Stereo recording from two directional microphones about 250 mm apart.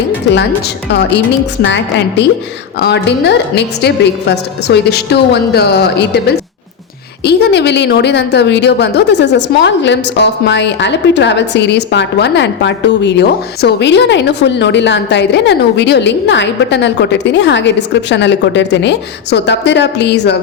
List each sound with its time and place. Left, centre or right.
0.9 s a woman's voice: left